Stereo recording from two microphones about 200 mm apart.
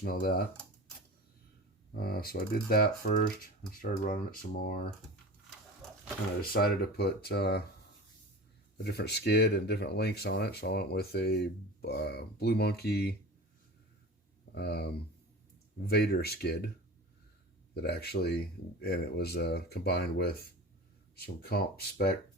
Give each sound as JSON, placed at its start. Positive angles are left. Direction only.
{"t": 0.0, "sound": "speech", "side_deg": 50}
{"t": 1.9, "sound": "speech", "side_deg": 50}
{"t": 6.4, "sound": "speech", "side_deg": 50}
{"t": 8.8, "sound": "speech", "side_deg": 55}
{"t": 14.5, "sound": "speech", "side_deg": 55}
{"t": 17.7, "sound": "speech", "side_deg": 50}